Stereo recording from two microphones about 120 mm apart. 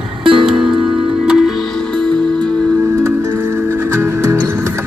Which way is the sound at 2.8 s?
20° right (ahead or behind).